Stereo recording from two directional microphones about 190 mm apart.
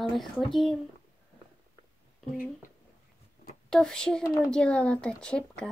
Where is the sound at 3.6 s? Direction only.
5° left (ahead or behind).